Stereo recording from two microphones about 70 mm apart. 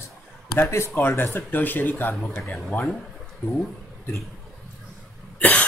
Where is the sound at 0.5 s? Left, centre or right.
Left.